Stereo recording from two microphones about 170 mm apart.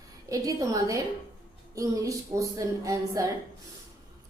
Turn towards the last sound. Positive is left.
turn(degrees=-20)  # may be behind; listen again after turning